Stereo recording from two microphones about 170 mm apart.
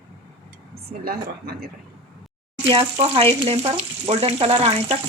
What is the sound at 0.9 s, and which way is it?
Speech, 65° right (ahead or behind).